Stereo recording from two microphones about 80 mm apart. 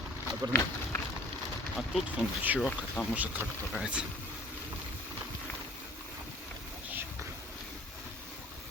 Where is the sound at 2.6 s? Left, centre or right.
Centre.